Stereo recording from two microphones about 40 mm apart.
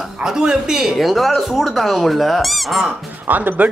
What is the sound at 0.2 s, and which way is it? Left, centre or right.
Speech, centre.